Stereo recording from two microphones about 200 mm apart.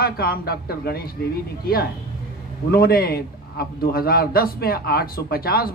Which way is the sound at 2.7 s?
50° left (ahead or behind).